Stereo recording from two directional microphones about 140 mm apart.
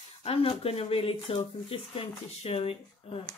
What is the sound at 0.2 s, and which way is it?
Speech, 45° left (ahead or behind).